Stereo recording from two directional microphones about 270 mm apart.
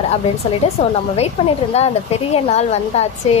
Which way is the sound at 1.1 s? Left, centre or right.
Left.